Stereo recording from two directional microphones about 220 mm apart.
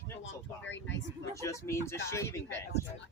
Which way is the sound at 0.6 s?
55° left (ahead or behind).